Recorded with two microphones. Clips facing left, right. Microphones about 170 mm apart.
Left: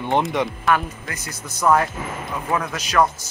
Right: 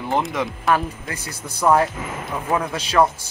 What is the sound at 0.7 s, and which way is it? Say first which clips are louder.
A man's voice: right 1 dB; 30° right (ahead or behind).